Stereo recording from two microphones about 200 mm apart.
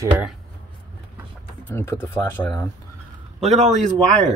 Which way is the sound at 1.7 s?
10° left (ahead or behind).